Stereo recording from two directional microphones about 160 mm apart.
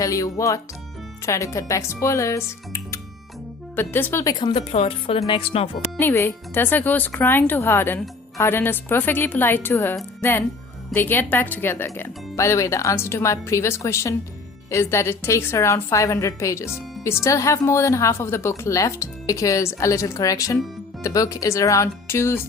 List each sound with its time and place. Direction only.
0.0 s speech: 20° left (ahead or behind)
6.0 s speech: 15° left (ahead or behind)